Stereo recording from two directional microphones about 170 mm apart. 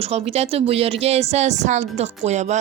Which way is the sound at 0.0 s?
35° right (ahead or behind).